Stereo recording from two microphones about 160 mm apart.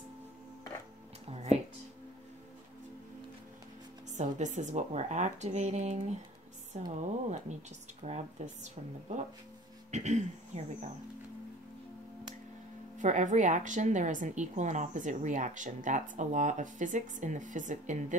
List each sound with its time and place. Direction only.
1.2 s a sound: 40° right (ahead or behind)
4.1 s a woman's voice: 50° right (ahead or behind)
9.8 s speech: 45° right (ahead or behind)
12.9 s a woman's voice: 50° right (ahead or behind)